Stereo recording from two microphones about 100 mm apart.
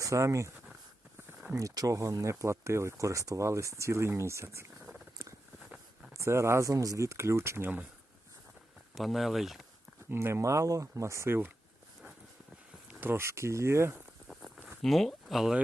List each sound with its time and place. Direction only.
0.0 s speech: 30° right (ahead or behind)
1.5 s speech: 35° right (ahead or behind)
4.8 s purr: 5° right (ahead or behind)
6.1 s speech: 30° right (ahead or behind)
9.0 s speech: centre (ahead or behind)
10.1 s speech: 25° right (ahead or behind)
12.9 s speech: 20° right (ahead or behind)
13.9 s walk: centre (ahead or behind)
14.8 s speech: 5° left (ahead or behind)